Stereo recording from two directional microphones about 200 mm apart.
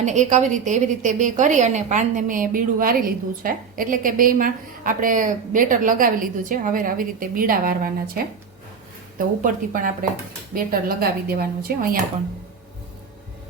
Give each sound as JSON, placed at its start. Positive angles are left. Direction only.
{"t": 0.0, "sound": "a woman's voice", "side_deg": -35}